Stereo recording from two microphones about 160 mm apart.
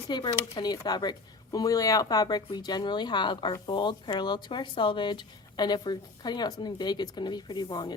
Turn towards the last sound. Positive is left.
turn(degrees=25)  # may be behind; listen again after turning